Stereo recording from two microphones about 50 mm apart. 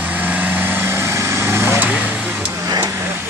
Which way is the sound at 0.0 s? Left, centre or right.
Right.